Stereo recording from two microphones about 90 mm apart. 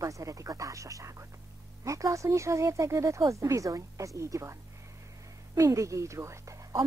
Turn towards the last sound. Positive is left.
turn(degrees=-35)  # may be behind; listen again after turning